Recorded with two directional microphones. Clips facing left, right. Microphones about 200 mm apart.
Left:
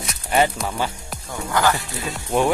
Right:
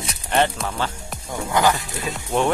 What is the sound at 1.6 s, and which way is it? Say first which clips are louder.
Speech: right 1 dB; 20° right (ahead or behind).